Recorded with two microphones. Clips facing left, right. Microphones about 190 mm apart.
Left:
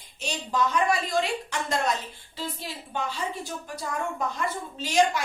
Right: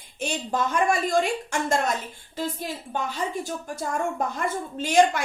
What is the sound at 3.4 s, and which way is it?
A woman's voice, 45° right (ahead or behind).